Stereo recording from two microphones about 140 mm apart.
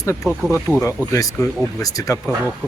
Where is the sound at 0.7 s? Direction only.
20° right (ahead or behind).